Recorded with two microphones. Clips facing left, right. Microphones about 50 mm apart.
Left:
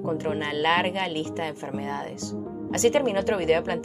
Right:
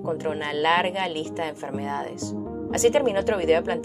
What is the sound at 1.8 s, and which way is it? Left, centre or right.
A woman's voice, right.